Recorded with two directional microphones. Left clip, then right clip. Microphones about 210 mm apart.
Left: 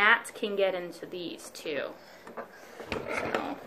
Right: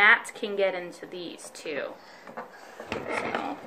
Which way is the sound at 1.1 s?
20° right (ahead or behind).